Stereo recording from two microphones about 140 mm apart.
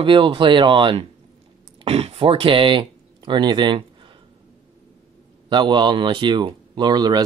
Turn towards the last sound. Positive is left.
turn(degrees=-30)  # may be behind; listen again after turning